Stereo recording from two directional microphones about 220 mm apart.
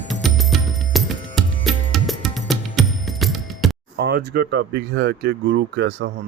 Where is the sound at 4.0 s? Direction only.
50° right (ahead or behind).